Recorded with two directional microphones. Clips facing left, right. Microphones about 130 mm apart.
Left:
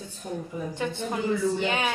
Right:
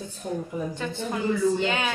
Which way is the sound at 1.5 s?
15° left (ahead or behind).